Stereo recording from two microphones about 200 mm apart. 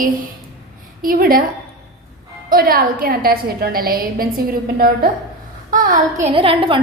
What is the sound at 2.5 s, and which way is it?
A woman's voice, 45° right (ahead or behind).